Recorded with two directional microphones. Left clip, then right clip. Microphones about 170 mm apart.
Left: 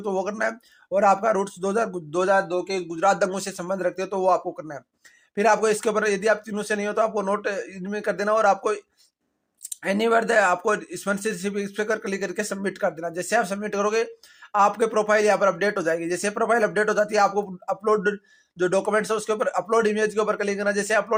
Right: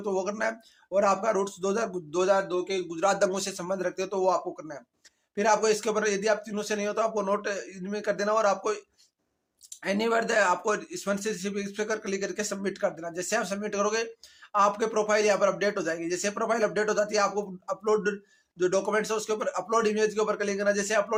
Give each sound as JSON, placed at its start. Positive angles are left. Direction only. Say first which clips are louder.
{"t": 0.0, "sound": "speech", "louder": "left 3 dB", "side_deg": 30}
{"t": 9.8, "sound": "speech", "louder": "left 5 dB", "side_deg": 30}